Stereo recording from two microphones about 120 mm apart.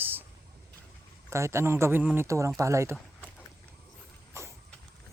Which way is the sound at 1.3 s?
25° right (ahead or behind).